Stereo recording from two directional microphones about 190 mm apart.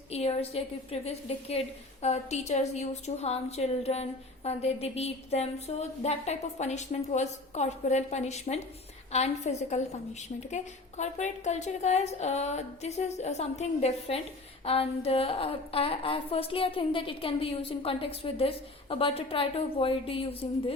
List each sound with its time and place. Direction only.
0.1 s a woman's voice: 30° left (ahead or behind)